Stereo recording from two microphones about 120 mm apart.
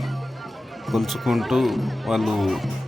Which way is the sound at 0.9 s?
Centre (ahead or behind).